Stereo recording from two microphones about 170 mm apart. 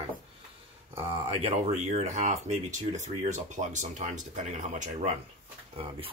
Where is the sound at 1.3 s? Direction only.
40° right (ahead or behind).